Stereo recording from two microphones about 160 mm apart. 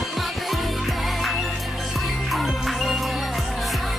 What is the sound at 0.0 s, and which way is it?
Music, centre (ahead or behind).